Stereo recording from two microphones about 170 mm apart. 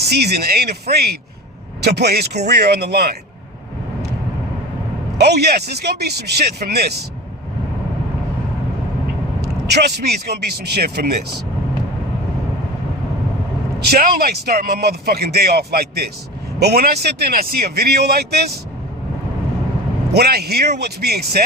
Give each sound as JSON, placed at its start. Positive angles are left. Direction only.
{"t": 0.2, "sound": "a man's voice", "side_deg": -70}
{"t": 5.1, "sound": "a man's voice", "side_deg": -75}
{"t": 9.7, "sound": "a man's voice", "side_deg": -75}
{"t": 13.7, "sound": "a man's voice", "side_deg": -65}
{"t": 20.1, "sound": "a man's voice", "side_deg": -70}